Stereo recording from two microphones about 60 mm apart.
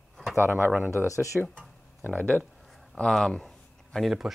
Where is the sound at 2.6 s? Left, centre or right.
Centre.